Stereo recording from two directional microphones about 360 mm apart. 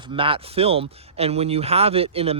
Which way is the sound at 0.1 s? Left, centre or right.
Centre.